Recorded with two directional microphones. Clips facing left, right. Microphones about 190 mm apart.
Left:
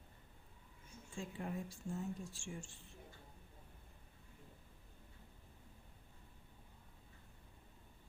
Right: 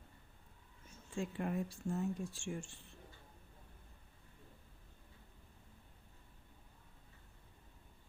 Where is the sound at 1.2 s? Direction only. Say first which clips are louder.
Right 6 dB; 65° right (ahead or behind).